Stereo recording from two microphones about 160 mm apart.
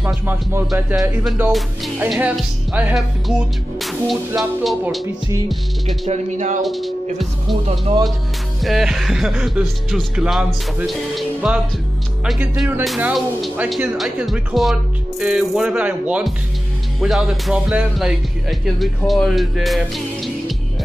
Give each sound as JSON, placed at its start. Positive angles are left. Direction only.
{"t": 0.0, "sound": "music", "side_deg": -10}
{"t": 1.2, "sound": "speech", "side_deg": 0}
{"t": 6.0, "sound": "speech", "side_deg": -50}
{"t": 6.6, "sound": "speech", "side_deg": 0}
{"t": 7.6, "sound": "speech", "side_deg": -40}
{"t": 8.6, "sound": "speech", "side_deg": 0}
{"t": 12.4, "sound": "music", "side_deg": -10}
{"t": 12.8, "sound": "speech", "side_deg": 0}